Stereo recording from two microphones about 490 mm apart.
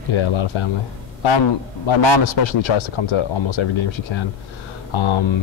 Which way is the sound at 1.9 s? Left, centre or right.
Left.